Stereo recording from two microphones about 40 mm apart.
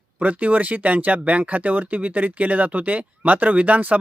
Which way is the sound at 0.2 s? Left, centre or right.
Right.